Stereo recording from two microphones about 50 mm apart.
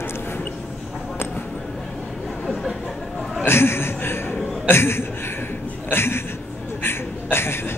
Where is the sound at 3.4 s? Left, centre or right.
Left.